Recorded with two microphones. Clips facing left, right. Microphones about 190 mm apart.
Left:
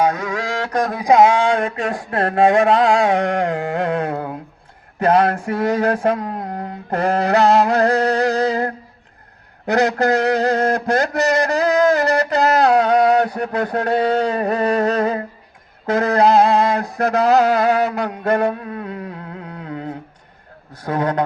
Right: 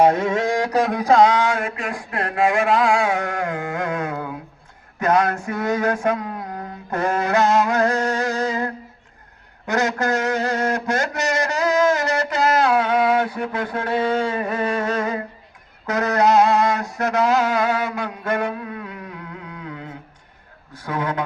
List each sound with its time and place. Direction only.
0.0 s a sound: 25° right (ahead or behind)
0.8 s speech: centre (ahead or behind)
1.0 s a man's voice: 20° left (ahead or behind)
15.9 s a sound: 30° left (ahead or behind)
17.0 s mantra: 35° left (ahead or behind)
20.8 s a man's voice: 40° left (ahead or behind)